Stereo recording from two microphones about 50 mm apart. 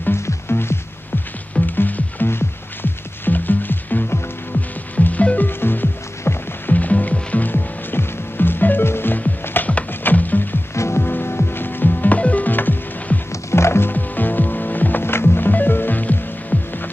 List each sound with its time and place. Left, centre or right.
0.1 s music: left
1.8 s music: left
2.2 s music: left
5.6 s music: left
10.7 s music: left
11.0 s music: left
13.3 s music: left
13.9 s music: left